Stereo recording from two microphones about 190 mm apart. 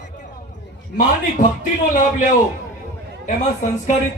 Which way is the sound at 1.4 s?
50° left (ahead or behind).